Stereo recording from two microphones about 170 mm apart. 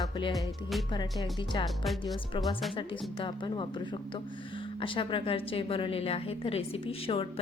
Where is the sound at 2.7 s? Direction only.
30° left (ahead or behind).